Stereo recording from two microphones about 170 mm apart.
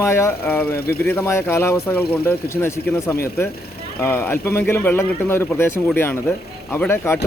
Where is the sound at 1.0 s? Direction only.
15° left (ahead or behind).